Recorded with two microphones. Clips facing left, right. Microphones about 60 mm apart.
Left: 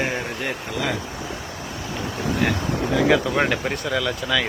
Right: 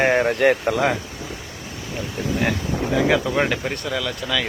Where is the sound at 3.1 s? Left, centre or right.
Centre.